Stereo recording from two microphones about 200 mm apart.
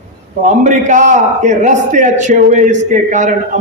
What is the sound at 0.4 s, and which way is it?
A man's voice, 40° right (ahead or behind).